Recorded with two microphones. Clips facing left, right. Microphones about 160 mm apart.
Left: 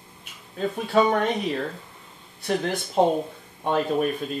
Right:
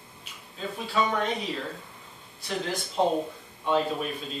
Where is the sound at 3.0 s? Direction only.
55° left (ahead or behind).